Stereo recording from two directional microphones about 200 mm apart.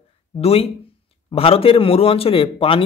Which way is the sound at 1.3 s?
30° left (ahead or behind).